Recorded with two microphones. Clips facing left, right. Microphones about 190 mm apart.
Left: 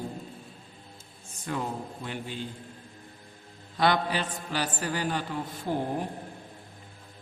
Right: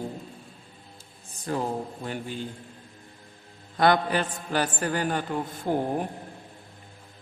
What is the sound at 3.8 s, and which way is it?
A man's voice, 50° right (ahead or behind).